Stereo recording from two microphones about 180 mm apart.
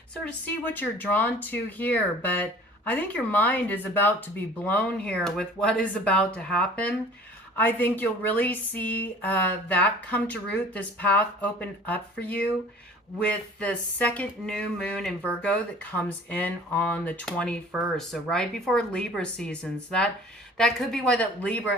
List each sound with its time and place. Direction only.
0.3 s speech: 10° left (ahead or behind)